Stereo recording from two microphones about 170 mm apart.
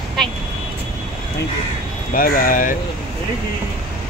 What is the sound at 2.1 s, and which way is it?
Speech, 55° left (ahead or behind).